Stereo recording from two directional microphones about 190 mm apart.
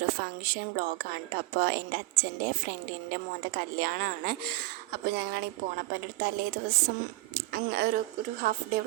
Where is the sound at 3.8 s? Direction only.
50° right (ahead or behind).